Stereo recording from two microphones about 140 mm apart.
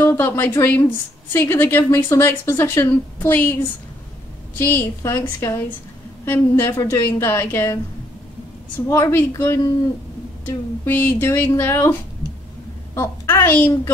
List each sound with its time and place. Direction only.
0.0 s a woman's voice: 15° left (ahead or behind)
8.8 s a woman's voice: 20° left (ahead or behind)
12.9 s a woman's voice: 15° left (ahead or behind)